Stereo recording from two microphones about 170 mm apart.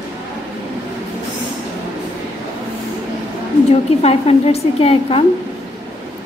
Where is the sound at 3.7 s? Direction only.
35° left (ahead or behind).